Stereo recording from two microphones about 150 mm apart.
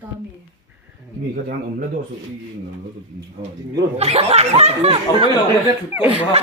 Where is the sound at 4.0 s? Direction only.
45° right (ahead or behind).